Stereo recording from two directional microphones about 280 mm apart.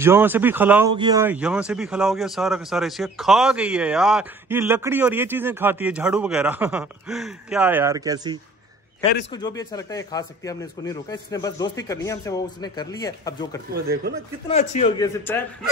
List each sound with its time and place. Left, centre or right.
0.0 s a man's voice: centre
9.3 s a man's voice: centre
13.7 s speech: right
14.5 s a man's voice: left
15.0 s a man's voice: centre